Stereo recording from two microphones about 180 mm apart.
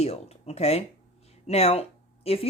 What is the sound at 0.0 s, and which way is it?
Speech, 35° left (ahead or behind).